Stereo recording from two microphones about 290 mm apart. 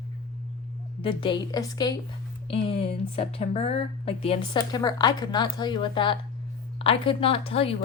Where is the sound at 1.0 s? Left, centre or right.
Centre.